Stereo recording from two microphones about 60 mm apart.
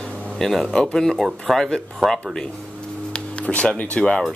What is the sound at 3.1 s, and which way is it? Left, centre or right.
Speech, centre.